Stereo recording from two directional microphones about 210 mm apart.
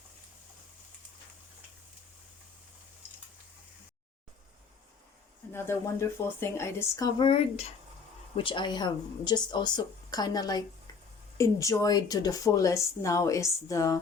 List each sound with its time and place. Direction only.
5.5 s speech: 10° left (ahead or behind)